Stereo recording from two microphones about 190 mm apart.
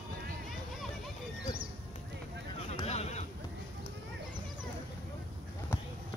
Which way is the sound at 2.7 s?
35° left (ahead or behind).